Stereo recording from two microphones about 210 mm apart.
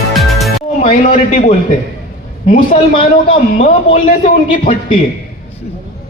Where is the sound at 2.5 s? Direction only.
35° left (ahead or behind).